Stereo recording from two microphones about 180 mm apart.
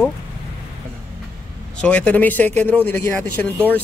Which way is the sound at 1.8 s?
5° left (ahead or behind).